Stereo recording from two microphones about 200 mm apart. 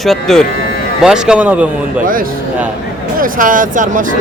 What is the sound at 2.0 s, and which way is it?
Speech, 45° right (ahead or behind).